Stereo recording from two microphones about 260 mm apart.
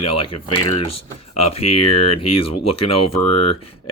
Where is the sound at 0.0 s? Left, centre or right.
Left.